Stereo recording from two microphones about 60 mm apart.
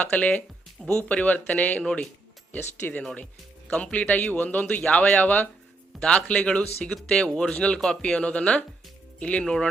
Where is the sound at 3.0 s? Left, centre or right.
Centre.